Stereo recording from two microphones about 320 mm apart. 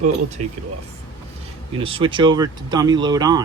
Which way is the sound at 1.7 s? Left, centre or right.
Centre.